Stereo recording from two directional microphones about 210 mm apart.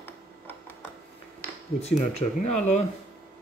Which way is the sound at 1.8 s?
30° left (ahead or behind).